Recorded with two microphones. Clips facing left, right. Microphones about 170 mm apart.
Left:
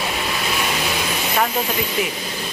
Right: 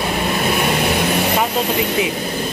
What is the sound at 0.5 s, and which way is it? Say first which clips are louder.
Vehicle: right 6 dB; 55° right (ahead or behind).